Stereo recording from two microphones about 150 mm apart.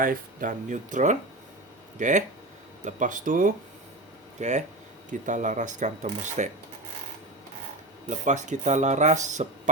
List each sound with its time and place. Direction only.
0.0 s speech: 65° right (ahead or behind)
4.4 s speech: 50° right (ahead or behind)
8.1 s speech: 50° right (ahead or behind)